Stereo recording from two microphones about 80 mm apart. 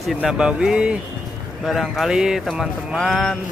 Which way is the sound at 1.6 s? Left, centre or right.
Centre.